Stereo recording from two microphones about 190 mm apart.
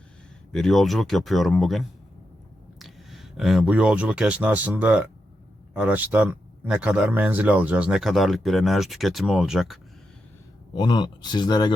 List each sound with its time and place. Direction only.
0.5 s speech: centre (ahead or behind)
10.8 s speech: 25° left (ahead or behind)